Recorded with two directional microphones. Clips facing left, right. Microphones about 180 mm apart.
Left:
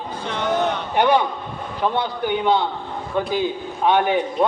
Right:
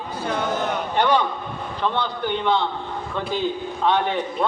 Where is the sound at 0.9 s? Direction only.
15° left (ahead or behind).